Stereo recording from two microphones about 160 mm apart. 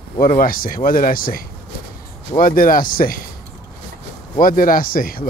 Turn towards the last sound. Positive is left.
turn(degrees=65)  # may be behind; listen again after turning